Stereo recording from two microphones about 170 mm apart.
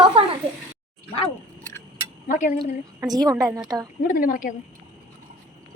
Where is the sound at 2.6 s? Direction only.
20° right (ahead or behind).